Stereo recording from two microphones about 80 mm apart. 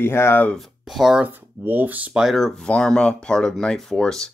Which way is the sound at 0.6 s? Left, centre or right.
Centre.